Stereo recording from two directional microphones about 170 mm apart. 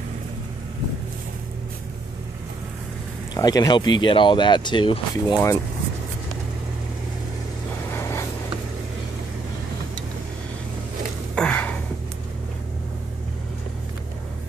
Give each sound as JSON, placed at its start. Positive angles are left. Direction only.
{"t": 3.3, "sound": "speech", "side_deg": 20}
{"t": 7.9, "sound": "vehicle", "side_deg": 15}
{"t": 11.3, "sound": "gasp", "side_deg": 5}